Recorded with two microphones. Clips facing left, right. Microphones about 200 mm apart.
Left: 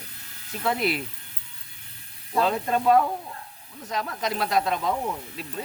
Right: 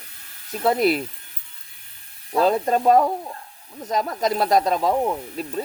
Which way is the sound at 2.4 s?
40° right (ahead or behind).